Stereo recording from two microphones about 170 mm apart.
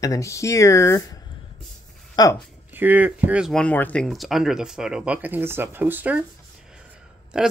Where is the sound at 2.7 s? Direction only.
10° right (ahead or behind).